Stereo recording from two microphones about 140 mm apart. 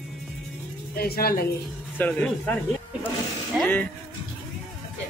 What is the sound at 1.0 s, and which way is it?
Speech, 90° left.